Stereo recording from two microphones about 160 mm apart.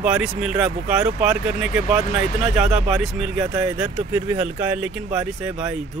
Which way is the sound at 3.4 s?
20° right (ahead or behind).